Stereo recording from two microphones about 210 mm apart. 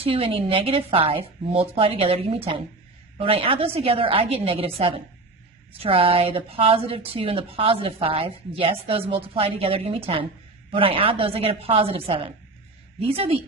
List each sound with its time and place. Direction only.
0.0 s speech: 25° right (ahead or behind)